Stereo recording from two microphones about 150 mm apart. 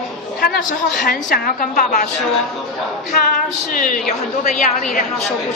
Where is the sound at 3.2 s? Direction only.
65° left (ahead or behind).